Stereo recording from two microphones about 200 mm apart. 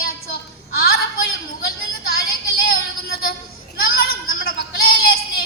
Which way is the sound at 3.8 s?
50° left (ahead or behind).